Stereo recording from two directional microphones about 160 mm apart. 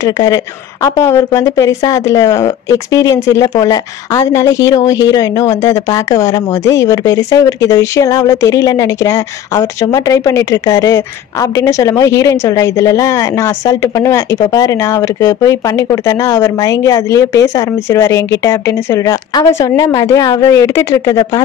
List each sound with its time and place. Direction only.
0.0 s a woman's voice: 25° left (ahead or behind)